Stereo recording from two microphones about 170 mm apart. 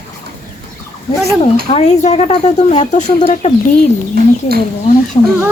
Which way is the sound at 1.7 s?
40° left (ahead or behind).